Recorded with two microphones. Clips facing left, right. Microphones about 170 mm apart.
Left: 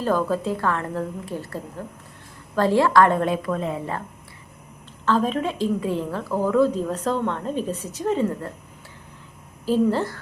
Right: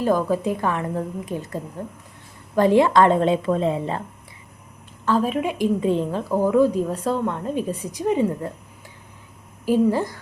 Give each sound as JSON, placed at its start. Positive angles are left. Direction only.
{"t": 0.0, "sound": "a woman's voice", "side_deg": -15}
{"t": 5.0, "sound": "a woman's voice", "side_deg": -10}
{"t": 9.6, "sound": "a woman's voice", "side_deg": -15}